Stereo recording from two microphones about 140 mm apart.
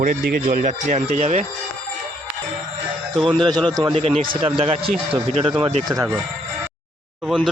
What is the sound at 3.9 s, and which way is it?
A man's voice, 45° right (ahead or behind).